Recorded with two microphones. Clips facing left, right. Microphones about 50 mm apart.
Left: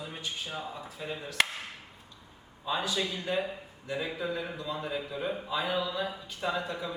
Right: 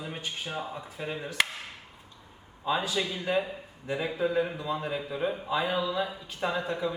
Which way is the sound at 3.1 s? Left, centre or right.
Centre.